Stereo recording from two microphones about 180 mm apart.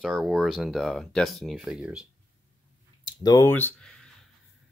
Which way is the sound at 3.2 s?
20° left (ahead or behind).